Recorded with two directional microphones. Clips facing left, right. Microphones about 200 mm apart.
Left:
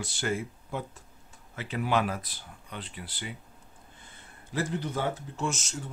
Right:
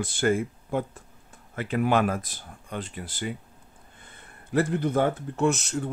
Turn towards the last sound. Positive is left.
turn(degrees=-60)  # may be behind; listen again after turning